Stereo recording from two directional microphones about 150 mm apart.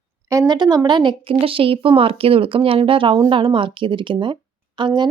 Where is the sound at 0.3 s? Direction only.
25° right (ahead or behind).